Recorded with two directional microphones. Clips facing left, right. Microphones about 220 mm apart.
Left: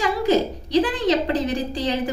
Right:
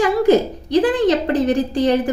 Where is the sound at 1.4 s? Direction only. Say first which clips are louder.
Right 7 dB; 55° right (ahead or behind).